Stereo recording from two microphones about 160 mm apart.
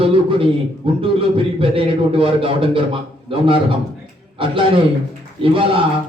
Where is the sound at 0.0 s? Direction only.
35° right (ahead or behind).